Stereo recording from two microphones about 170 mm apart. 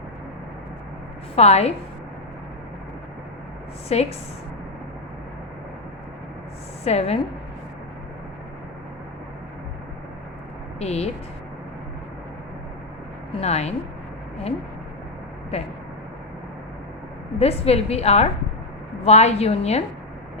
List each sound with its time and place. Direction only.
1.4 s a woman's voice: 40° left (ahead or behind)
3.9 s a woman's voice: 40° left (ahead or behind)
6.8 s a woman's voice: 40° left (ahead or behind)
10.8 s speech: 40° left (ahead or behind)
13.4 s a woman's voice: 40° left (ahead or behind)
17.4 s a woman's voice: 35° left (ahead or behind)